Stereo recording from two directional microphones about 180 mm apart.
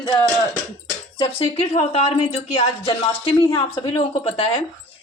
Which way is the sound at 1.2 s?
30° left (ahead or behind).